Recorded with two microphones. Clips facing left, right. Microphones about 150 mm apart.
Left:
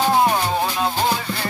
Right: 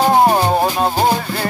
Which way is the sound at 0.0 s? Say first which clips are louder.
Right 5 dB; 45° right (ahead or behind).